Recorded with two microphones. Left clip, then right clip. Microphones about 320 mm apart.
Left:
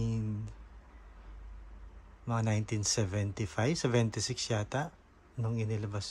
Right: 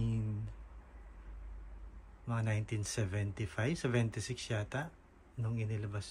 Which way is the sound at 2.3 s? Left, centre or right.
Centre.